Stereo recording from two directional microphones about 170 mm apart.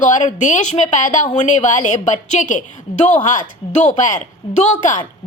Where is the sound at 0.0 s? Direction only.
45° left (ahead or behind).